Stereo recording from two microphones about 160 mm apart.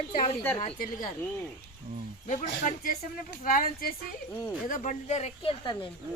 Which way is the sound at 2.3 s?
55° left (ahead or behind).